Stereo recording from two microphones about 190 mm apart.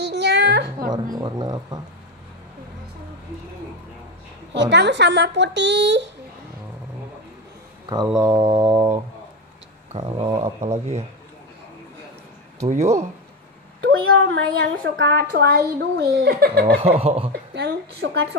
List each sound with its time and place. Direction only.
0.0 s a sound: 65° right (ahead or behind)
0.9 s speech: 20° right (ahead or behind)
4.6 s a child's voice: 65° right (ahead or behind)
8.2 s speech: 25° right (ahead or behind)
9.9 s speech: 30° right (ahead or behind)
12.6 s speech: 35° right (ahead or behind)
13.8 s a woman's voice: 80° right
15.0 s a child's voice: 65° right (ahead or behind)
16.7 s speech: 30° right (ahead or behind)
17.3 s a woman's voice: 60° right (ahead or behind)